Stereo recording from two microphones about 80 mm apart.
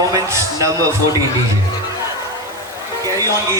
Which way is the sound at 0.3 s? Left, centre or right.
Right.